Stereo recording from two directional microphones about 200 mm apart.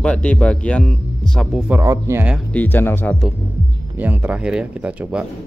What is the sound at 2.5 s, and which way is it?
Speech, 10° left (ahead or behind).